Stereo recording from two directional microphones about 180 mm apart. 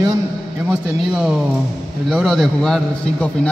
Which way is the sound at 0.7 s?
5° right (ahead or behind).